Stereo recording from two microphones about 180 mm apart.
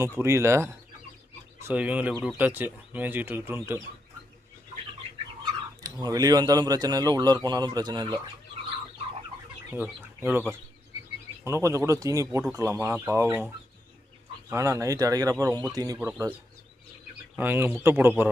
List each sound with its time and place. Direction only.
0.0 s speech: 15° right (ahead or behind)
5.8 s speech: 20° right (ahead or behind)
9.7 s speech: 10° right (ahead or behind)
11.4 s speech: 15° right (ahead or behind)
14.5 s speech: 20° right (ahead or behind)
17.3 s speech: 10° right (ahead or behind)